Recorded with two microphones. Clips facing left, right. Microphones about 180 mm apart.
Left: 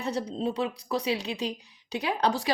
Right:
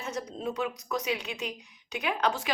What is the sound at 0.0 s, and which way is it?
Speech, 30° left (ahead or behind).